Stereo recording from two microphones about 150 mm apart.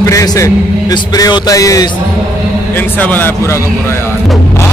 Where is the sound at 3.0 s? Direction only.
10° left (ahead or behind).